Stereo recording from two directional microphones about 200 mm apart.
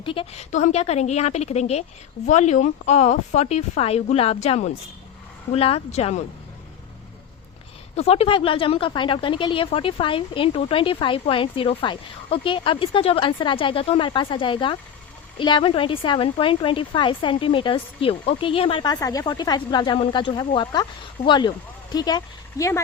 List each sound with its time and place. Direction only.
0.0 s a woman's voice: 25° left (ahead or behind)
7.9 s a woman's voice: 30° left (ahead or behind); by 22.8 s 15° left (ahead or behind)